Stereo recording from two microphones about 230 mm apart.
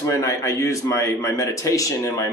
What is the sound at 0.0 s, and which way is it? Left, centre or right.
A man's voice, centre.